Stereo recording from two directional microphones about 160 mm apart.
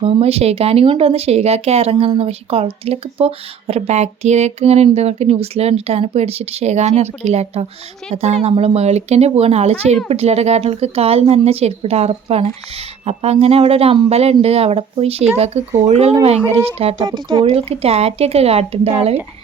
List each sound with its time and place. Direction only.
0.0 s speech: 35° right (ahead or behind)